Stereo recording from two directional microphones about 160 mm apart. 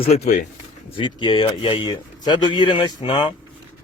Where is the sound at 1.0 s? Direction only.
30° left (ahead or behind).